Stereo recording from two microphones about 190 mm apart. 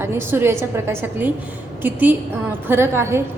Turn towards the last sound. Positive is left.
turn(degrees=-15)  # may be behind; listen again after turning